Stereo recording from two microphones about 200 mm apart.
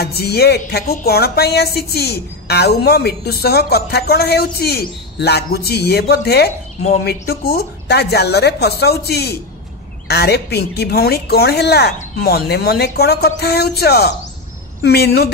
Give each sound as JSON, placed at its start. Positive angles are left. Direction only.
{"t": 0.0, "sound": "a woman's voice", "side_deg": 55}